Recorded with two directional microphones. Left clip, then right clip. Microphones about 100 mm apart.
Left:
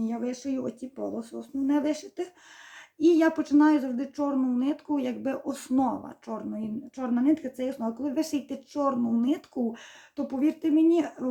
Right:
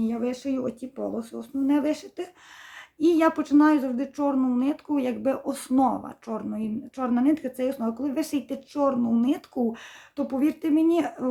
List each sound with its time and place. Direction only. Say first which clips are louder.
0.0 s speech: right 4 dB; 25° right (ahead or behind)